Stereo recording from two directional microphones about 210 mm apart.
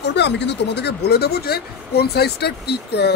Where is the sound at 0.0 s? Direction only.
55° left (ahead or behind).